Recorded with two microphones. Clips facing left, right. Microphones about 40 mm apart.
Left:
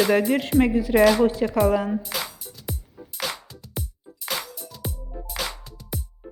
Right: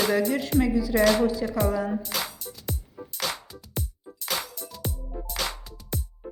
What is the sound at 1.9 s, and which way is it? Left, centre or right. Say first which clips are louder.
Music: left 2 dB; centre.